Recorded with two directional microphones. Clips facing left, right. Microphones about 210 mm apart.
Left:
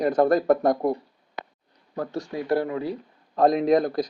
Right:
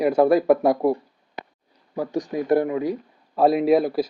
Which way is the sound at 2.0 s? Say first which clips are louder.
Right 4 dB; 15° right (ahead or behind).